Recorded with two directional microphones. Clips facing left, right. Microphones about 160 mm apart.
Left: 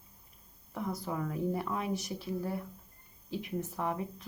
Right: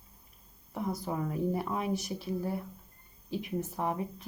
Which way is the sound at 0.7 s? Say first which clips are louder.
Right 2 dB; 15° right (ahead or behind).